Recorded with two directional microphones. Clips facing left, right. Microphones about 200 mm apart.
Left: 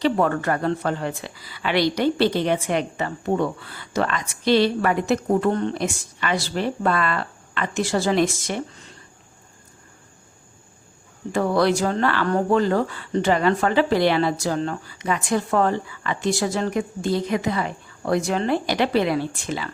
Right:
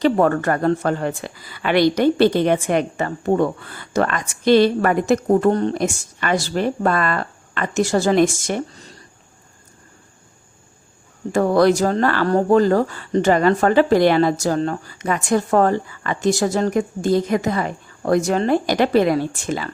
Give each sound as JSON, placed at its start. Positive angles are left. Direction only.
{"t": 0.0, "sound": "speech", "side_deg": -45}
{"t": 11.3, "sound": "speech", "side_deg": -45}